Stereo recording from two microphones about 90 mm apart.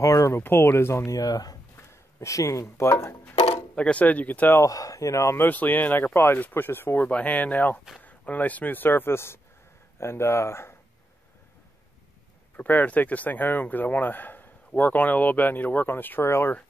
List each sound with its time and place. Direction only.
0.0 s speech: 35° left (ahead or behind)
0.4 s speech: 25° left (ahead or behind)
3.7 s speech: 15° left (ahead or behind)
4.6 s a man's voice: 40° left (ahead or behind)
5.5 s speech: 20° left (ahead or behind)
12.5 s speech: 20° left (ahead or behind)